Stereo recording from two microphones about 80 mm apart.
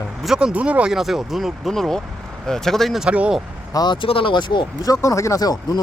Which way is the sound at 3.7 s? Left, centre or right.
Left.